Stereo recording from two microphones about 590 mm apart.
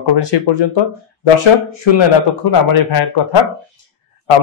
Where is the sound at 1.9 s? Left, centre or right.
Left.